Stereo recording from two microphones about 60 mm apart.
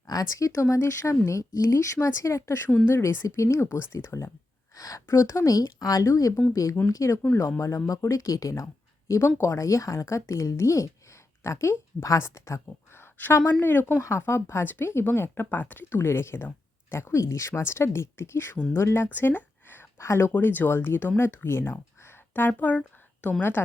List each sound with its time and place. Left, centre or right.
0.1 s a woman's voice: left
2.0 s speech: left
2.6 s speech: left
2.9 s speech: left
4.7 s a woman's voice: left
6.8 s speech: left
7.9 s speech: left
10.6 s a woman's voice: left
12.9 s a sound: left
13.3 s speech: left
17.5 s speech: left
19.0 s a sound: left
20.0 s speech: left